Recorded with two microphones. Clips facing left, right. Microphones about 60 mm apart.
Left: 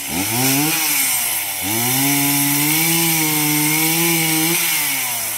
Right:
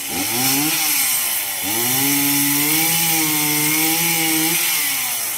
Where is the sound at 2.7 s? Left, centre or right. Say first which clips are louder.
Left 2 dB; centre.